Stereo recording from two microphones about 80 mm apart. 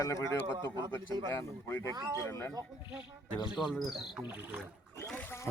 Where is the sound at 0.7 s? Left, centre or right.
Right.